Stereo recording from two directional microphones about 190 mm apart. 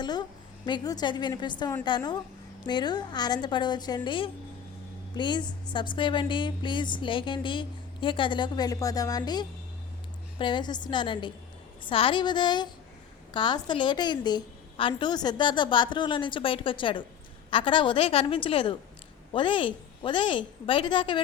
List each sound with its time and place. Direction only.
0.0 s a woman's voice: 20° left (ahead or behind)